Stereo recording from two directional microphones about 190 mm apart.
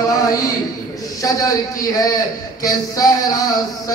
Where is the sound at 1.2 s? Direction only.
15° left (ahead or behind).